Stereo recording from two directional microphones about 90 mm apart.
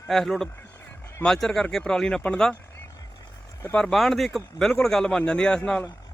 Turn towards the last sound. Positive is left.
turn(degrees=10)  # may be behind; listen again after turning